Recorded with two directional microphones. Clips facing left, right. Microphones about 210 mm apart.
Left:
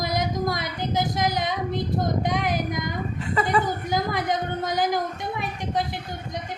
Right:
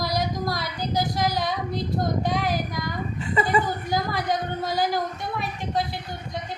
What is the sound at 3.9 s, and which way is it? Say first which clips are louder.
Speech: even; 20° left (ahead or behind).